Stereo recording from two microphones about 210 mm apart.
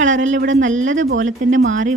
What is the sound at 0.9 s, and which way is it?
Speech, 65° right (ahead or behind).